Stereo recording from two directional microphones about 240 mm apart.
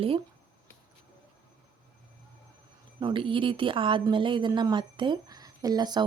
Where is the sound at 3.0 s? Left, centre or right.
Right.